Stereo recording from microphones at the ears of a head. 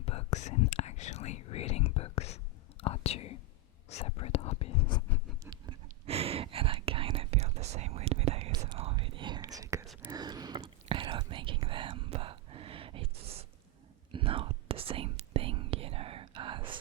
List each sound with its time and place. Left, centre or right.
0.0 s whispering: left
5.5 s whispering: right